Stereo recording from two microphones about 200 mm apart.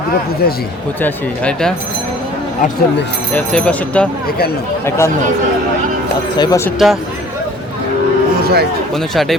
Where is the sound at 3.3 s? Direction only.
5° left (ahead or behind).